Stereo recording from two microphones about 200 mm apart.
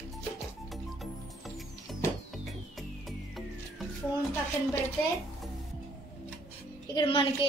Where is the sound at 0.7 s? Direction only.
Centre (ahead or behind).